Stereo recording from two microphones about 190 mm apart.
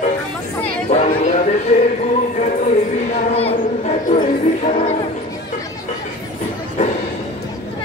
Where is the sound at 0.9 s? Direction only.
40° left (ahead or behind).